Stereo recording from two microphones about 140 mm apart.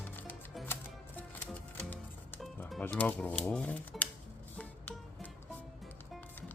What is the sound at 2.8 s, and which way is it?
Speech, 10° left (ahead or behind).